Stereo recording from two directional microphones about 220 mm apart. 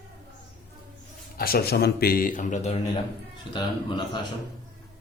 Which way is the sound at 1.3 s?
40° left (ahead or behind).